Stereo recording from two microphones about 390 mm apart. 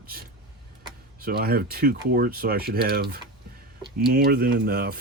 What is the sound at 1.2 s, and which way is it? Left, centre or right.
Speech, right.